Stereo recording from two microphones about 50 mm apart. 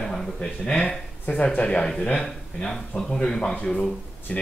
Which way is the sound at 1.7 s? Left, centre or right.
Centre.